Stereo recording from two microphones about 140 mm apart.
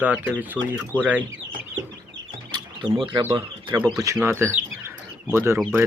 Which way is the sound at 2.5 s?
35° right (ahead or behind).